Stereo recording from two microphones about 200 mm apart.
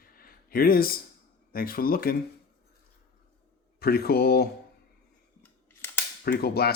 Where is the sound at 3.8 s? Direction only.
50° left (ahead or behind).